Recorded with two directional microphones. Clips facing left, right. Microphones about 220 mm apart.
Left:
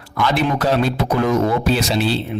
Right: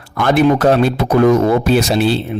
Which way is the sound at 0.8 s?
50° right (ahead or behind).